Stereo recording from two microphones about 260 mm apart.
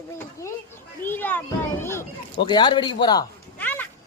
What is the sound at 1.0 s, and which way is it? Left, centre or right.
A child's voice, centre.